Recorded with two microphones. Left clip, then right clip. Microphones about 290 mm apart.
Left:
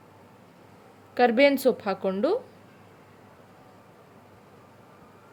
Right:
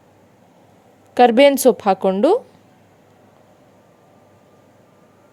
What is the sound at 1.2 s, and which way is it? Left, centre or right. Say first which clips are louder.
A woman's voice: right 9 dB; right.